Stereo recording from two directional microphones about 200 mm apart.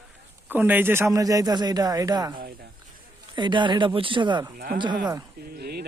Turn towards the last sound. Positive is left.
turn(degrees=-50)  # may be behind; listen again after turning